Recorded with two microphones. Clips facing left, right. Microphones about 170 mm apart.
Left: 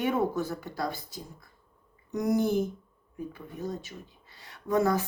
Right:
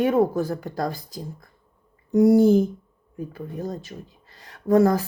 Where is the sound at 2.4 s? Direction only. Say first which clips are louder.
Right 10 dB; 90° right.